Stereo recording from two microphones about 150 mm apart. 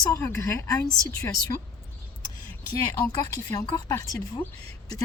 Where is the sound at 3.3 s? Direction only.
25° left (ahead or behind).